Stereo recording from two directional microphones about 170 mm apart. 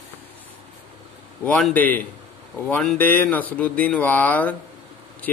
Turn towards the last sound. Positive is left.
turn(degrees=10)  # may be behind; listen again after turning